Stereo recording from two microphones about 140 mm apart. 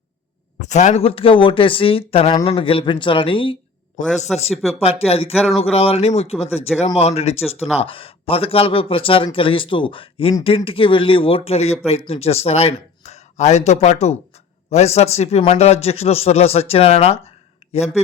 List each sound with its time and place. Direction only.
0.6 s speech: 60° left (ahead or behind)
1.0 s speech: 40° left (ahead or behind)
4.0 s a man's voice: 65° left (ahead or behind)
4.5 s speech: centre (ahead or behind)
4.8 s a man's voice: 45° left (ahead or behind)